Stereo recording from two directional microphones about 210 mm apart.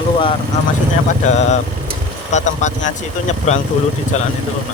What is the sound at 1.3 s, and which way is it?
Speech, 35° left (ahead or behind).